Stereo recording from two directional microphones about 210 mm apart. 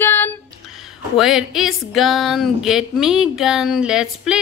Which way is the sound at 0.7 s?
Centre (ahead or behind).